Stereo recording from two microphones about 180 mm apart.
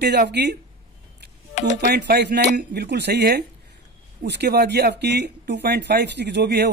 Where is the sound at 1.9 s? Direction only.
65° right (ahead or behind).